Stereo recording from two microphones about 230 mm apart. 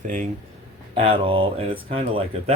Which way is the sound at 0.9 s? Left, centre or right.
Right.